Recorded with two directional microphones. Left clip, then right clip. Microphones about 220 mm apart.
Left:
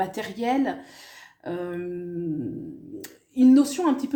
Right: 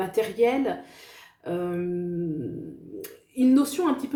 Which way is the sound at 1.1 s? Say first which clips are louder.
Right 2 dB; 35° left (ahead or behind).